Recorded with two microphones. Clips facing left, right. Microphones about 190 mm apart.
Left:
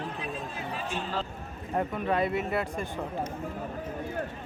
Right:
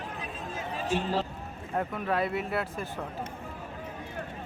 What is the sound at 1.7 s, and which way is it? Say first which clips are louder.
Speech: left 2 dB; centre (ahead or behind).